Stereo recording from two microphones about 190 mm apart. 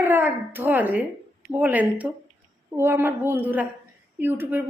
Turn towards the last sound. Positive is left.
turn(degrees=-10)  # may be behind; listen again after turning